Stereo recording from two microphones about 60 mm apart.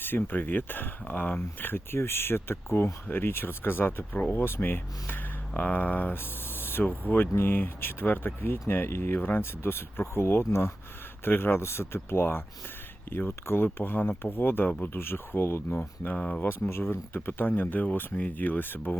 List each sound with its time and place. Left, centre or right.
0.0 s speech: left
6.6 s a sound: left
6.8 s speech: left
16.0 s speech: centre
16.4 s speech: left